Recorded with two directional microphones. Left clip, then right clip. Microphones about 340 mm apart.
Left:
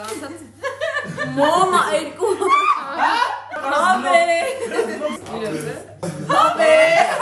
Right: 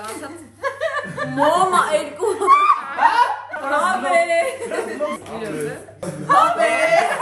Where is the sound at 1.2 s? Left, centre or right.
Centre.